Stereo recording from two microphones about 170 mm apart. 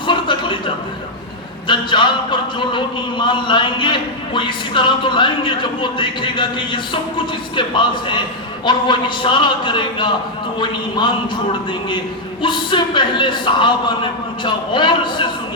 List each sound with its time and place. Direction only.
0.1 s a sound: 30° left (ahead or behind)
1.6 s a man's voice: 30° left (ahead or behind)
12.4 s a man's voice: 30° left (ahead or behind)